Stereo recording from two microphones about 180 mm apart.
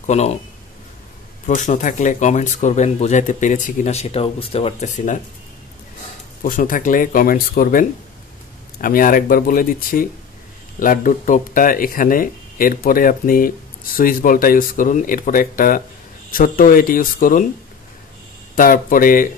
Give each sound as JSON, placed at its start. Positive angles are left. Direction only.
{"t": 0.0, "sound": "speech", "side_deg": 40}
{"t": 1.5, "sound": "speech", "side_deg": 45}
{"t": 6.4, "sound": "speech", "side_deg": 50}
{"t": 8.8, "sound": "speech", "side_deg": 50}
{"t": 18.5, "sound": "speech", "side_deg": 50}